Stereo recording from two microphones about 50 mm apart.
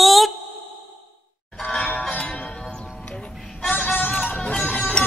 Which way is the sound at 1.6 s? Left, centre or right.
Left.